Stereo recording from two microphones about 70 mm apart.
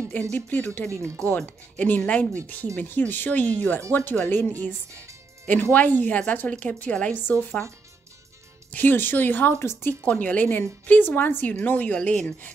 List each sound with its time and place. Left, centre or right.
0.1 s speech: left
8.7 s a woman's voice: left
10.0 s speech: left